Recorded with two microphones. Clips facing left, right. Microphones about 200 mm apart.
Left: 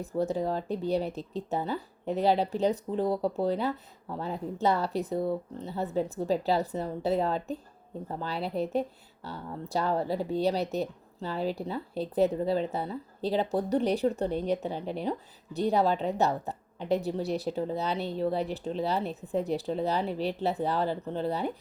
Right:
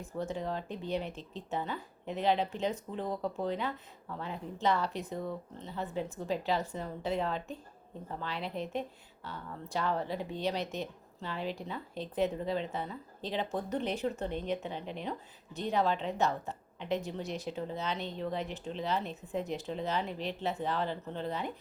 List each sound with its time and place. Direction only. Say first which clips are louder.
0.0 s a woman's voice: left 7 dB; 35° left (ahead or behind)